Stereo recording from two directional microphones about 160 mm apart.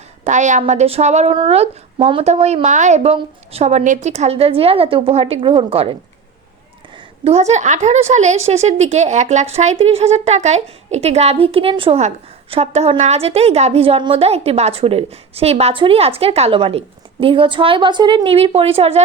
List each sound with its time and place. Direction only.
0.3 s a woman's voice: 50° right (ahead or behind)
7.3 s a woman's voice: 45° right (ahead or behind)